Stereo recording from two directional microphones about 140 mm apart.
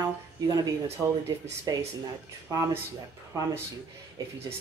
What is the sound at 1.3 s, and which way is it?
Speech, 25° right (ahead or behind).